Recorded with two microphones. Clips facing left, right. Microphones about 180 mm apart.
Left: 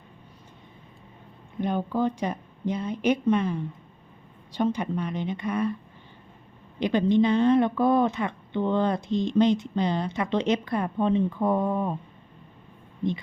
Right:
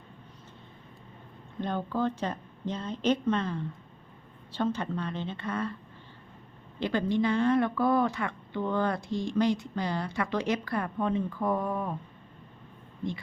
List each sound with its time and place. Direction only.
1.5 s speech: 15° left (ahead or behind)
6.7 s speech: 20° left (ahead or behind)